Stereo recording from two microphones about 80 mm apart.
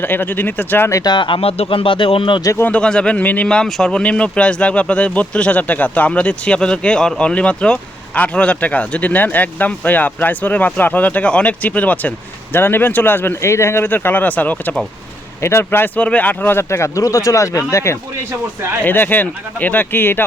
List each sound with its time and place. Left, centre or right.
0.0 s speech: left
1.0 s speech: left
2.7 s speech: centre
15.4 s speech: left
16.6 s speech: left
18.9 s speech: left